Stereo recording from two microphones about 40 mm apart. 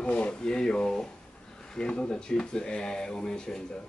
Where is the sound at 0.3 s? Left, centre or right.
Left.